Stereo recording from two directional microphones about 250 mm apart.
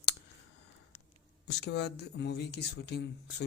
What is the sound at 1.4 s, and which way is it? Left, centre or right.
Speech, left.